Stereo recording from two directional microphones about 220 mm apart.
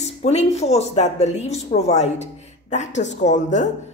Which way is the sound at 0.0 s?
30° left (ahead or behind).